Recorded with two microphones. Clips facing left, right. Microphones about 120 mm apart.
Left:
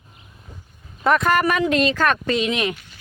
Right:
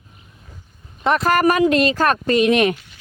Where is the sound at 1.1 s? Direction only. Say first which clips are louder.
Right 2 dB; 30° right (ahead or behind).